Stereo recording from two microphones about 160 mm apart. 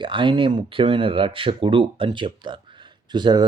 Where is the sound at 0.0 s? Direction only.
30° right (ahead or behind).